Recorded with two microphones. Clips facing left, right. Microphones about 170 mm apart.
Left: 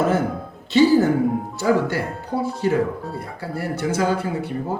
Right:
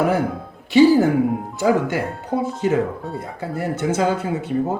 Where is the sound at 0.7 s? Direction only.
15° right (ahead or behind).